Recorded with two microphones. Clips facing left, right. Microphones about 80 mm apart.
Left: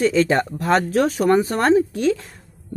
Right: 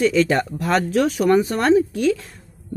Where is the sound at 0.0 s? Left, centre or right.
Left.